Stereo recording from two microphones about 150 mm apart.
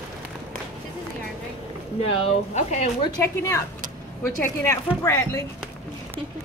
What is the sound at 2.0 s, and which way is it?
Speech, 40° left (ahead or behind).